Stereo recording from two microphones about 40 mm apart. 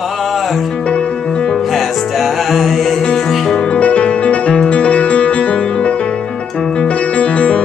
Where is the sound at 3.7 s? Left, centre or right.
Left.